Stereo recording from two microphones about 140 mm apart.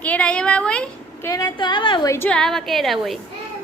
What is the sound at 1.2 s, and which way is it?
Speech, 25° left (ahead or behind).